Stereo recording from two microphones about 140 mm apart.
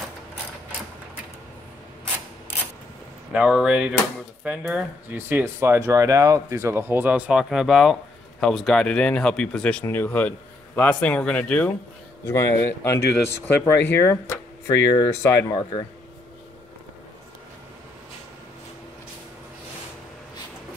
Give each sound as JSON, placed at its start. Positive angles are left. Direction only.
{"t": 3.3, "sound": "speech", "side_deg": -5}